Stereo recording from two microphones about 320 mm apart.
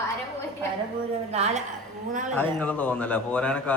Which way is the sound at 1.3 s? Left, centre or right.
Right.